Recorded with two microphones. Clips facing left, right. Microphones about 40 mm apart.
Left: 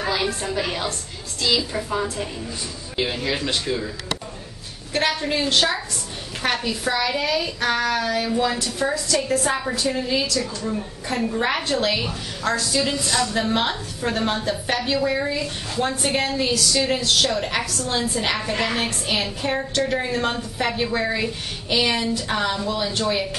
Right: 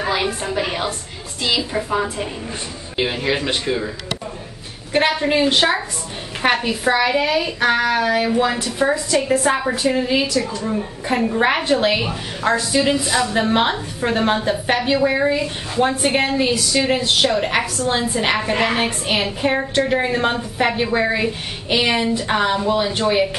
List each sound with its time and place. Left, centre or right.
0.0 s a woman's voice: centre
4.9 s a woman's voice: right